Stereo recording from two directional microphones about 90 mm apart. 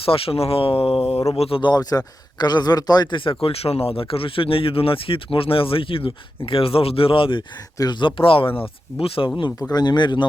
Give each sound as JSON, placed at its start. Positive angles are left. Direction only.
{"t": 0.0, "sound": "speech", "side_deg": 90}
{"t": 1.3, "sound": "speech", "side_deg": 70}
{"t": 1.7, "sound": "speech", "side_deg": 45}
{"t": 7.8, "sound": "speech", "side_deg": 55}
{"t": 9.6, "sound": "speech", "side_deg": 50}